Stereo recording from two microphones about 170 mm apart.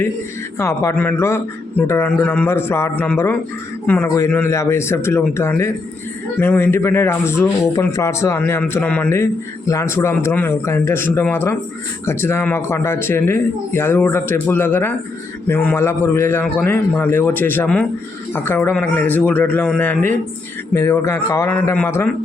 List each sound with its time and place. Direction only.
0.6 s a man's voice: 15° left (ahead or behind)